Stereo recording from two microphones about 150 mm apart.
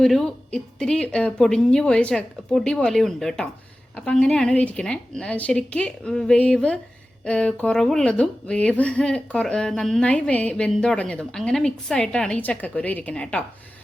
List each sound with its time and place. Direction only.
0.0 s a woman's voice: 5° left (ahead or behind)